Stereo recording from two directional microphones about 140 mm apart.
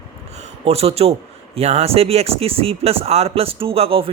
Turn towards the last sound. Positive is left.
turn(degrees=-45)  # may be behind; listen again after turning